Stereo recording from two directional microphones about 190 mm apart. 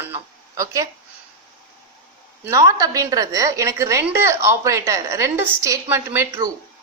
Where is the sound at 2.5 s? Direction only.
15° right (ahead or behind).